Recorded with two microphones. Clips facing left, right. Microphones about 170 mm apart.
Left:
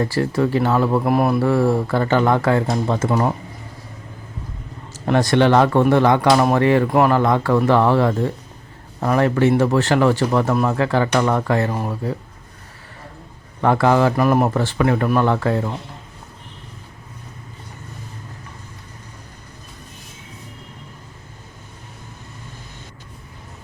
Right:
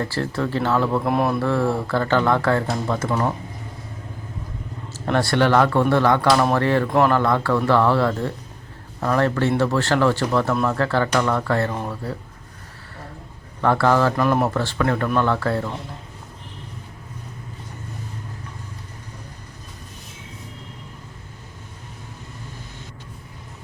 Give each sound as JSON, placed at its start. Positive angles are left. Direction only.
{"t": 0.0, "sound": "speech", "side_deg": 15}
{"t": 5.0, "sound": "speech", "side_deg": 15}
{"t": 13.6, "sound": "speech", "side_deg": 15}